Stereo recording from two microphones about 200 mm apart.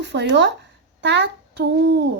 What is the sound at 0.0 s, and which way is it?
A child's voice, 60° right (ahead or behind).